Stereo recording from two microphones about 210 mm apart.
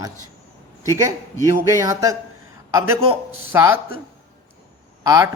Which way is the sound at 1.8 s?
15° right (ahead or behind).